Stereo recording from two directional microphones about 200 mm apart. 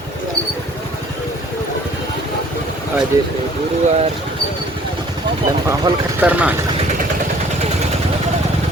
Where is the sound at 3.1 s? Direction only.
15° right (ahead or behind).